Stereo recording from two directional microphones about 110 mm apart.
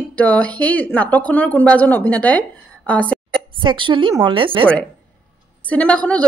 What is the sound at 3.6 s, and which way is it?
A woman's voice, 50° right (ahead or behind).